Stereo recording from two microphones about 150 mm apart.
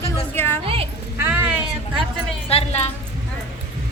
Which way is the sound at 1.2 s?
15° right (ahead or behind).